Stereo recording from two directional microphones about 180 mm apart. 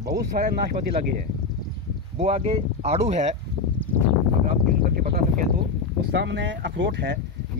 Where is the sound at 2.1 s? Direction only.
35° right (ahead or behind).